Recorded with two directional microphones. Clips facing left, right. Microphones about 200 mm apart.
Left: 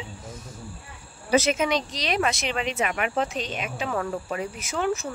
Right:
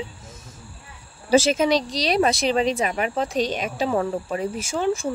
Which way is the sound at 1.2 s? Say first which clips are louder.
Right 4 dB; 30° right (ahead or behind).